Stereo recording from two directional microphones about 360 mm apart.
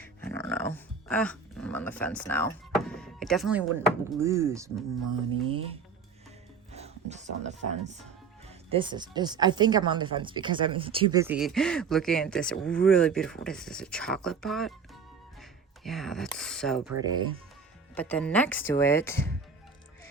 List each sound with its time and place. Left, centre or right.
0.0 s music: centre
6.7 s speech: centre